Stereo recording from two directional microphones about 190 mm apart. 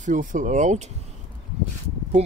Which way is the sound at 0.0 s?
40° right (ahead or behind).